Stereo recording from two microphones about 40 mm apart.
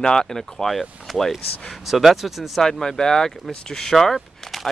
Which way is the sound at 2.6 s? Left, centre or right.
Centre.